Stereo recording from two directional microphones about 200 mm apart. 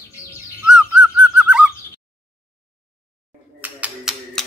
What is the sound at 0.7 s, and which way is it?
Bird, 5° right (ahead or behind).